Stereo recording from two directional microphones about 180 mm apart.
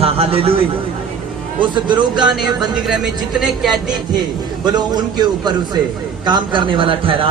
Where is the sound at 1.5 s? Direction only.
25° right (ahead or behind).